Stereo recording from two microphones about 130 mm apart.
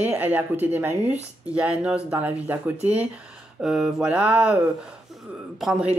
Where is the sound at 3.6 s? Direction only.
5° right (ahead or behind).